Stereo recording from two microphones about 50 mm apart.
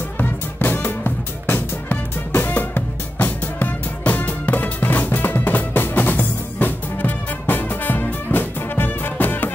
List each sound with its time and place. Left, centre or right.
0.2 s music: left